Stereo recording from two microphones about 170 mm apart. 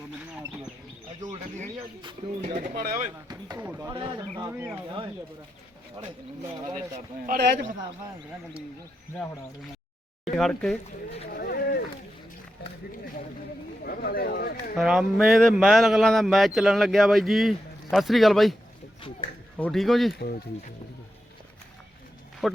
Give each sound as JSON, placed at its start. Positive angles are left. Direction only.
{"t": 1.2, "sound": "bird", "side_deg": -45}
{"t": 2.0, "sound": "speech", "side_deg": -25}
{"t": 2.6, "sound": "speech", "side_deg": -60}
{"t": 3.6, "sound": "speech", "side_deg": -15}
{"t": 3.9, "sound": "speech", "side_deg": -30}
{"t": 4.4, "sound": "speech", "side_deg": -15}
{"t": 7.3, "sound": "a man's voice", "side_deg": -70}
{"t": 10.3, "sound": "speech", "side_deg": 5}
{"t": 11.3, "sound": "a sound", "side_deg": 60}
{"t": 13.8, "sound": "a sound", "side_deg": 60}
{"t": 14.8, "sound": "speech", "side_deg": 0}
{"t": 19.5, "sound": "speech", "side_deg": 5}
{"t": 22.4, "sound": "speech", "side_deg": 0}